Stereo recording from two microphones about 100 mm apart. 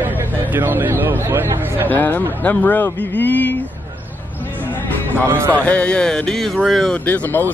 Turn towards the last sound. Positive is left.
turn(degrees=20)  # may be behind; listen again after turning